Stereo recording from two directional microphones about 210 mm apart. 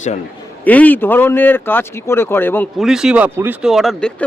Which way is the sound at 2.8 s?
Centre (ahead or behind).